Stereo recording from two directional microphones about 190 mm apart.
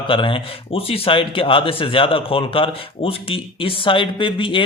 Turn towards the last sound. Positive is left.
turn(degrees=25)  # may be behind; listen again after turning